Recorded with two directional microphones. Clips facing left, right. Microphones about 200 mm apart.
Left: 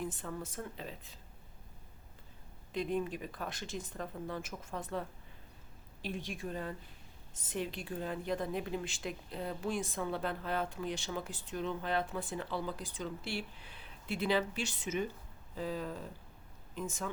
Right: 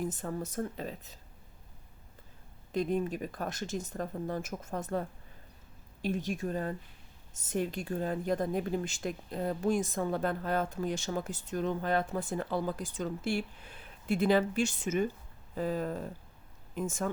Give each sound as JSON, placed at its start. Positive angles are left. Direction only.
{"t": 0.0, "sound": "speech", "side_deg": -45}
{"t": 2.7, "sound": "speech", "side_deg": -40}